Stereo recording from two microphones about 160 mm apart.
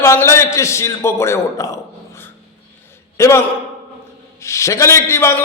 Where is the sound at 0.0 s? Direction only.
15° left (ahead or behind).